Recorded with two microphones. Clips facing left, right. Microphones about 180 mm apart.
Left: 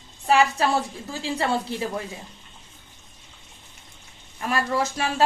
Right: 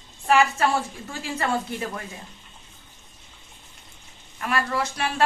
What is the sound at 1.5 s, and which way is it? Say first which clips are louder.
Speech: left 1 dB; 30° left (ahead or behind).